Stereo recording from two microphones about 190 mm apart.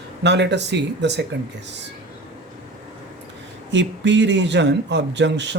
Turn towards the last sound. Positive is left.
turn(degrees=-65)  # may be behind; listen again after turning